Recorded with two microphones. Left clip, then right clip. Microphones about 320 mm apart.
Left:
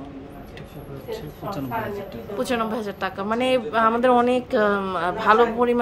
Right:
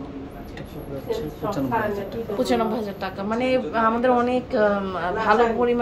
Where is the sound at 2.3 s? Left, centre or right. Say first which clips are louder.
Right 1 dB; centre.